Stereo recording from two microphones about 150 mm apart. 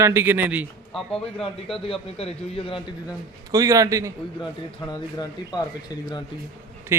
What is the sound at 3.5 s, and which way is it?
Speech, 25° right (ahead or behind).